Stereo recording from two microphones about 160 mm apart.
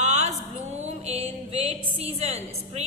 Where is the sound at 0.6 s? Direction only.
45° right (ahead or behind).